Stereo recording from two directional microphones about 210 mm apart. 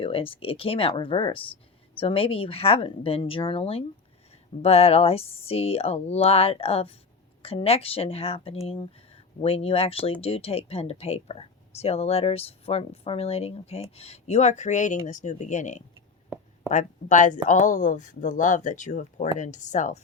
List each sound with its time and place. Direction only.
0.0 s speech: 25° left (ahead or behind)